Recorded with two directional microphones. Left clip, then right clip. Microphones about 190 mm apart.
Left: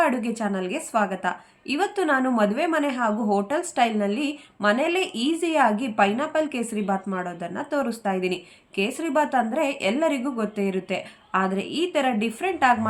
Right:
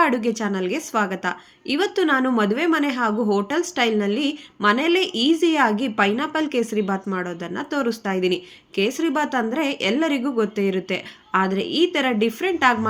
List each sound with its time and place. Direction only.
0.0 s a woman's voice: 15° right (ahead or behind)